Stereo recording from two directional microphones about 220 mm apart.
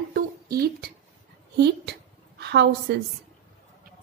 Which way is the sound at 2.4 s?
50° right (ahead or behind).